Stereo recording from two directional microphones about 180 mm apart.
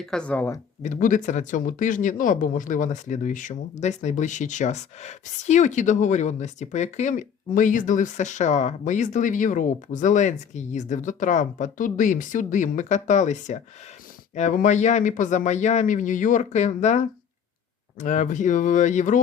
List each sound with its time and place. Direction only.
0.0 s speech: 5° left (ahead or behind)
0.8 s speech: 45° left (ahead or behind)
18.0 s speech: 45° left (ahead or behind)